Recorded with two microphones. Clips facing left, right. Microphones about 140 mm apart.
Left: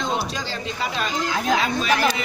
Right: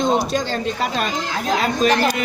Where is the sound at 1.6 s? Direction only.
40° right (ahead or behind).